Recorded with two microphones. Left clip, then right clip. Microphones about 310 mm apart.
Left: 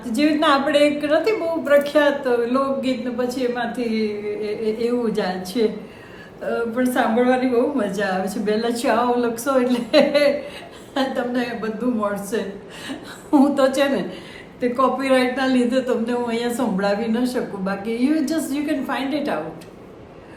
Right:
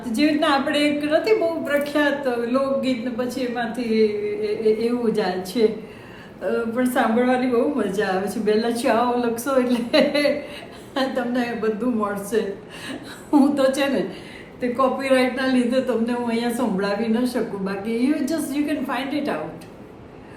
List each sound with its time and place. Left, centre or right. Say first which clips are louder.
0.0 s a woman's voice: left 2 dB; centre